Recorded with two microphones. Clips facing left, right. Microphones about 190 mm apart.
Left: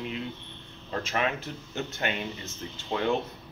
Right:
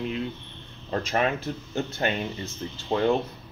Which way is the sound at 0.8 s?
40° right (ahead or behind).